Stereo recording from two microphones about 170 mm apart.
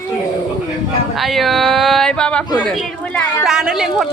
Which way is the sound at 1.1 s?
Centre (ahead or behind).